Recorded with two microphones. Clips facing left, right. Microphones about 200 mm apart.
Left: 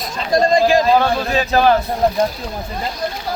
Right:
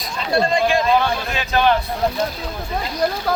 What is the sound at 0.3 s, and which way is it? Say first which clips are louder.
A man's voice: left 4 dB; 40° left (ahead or behind).